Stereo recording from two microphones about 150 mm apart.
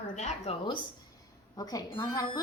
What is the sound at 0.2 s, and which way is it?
Speech, 50° left (ahead or behind).